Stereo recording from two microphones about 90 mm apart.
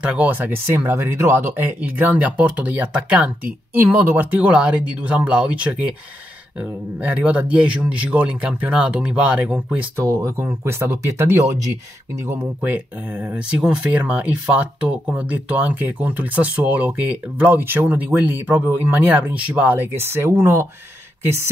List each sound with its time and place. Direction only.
0.0 s speech: 15° right (ahead or behind)
7.0 s speech: 15° right (ahead or behind)
9.9 s speech: 30° right (ahead or behind)
12.3 s speech: 25° right (ahead or behind)
13.5 s speech: 10° right (ahead or behind); by 20.6 s 30° right (ahead or behind)